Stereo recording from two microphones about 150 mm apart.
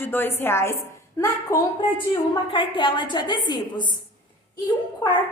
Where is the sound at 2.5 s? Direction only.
35° left (ahead or behind).